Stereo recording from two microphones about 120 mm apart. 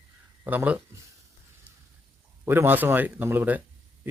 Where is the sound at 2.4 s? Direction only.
15° right (ahead or behind).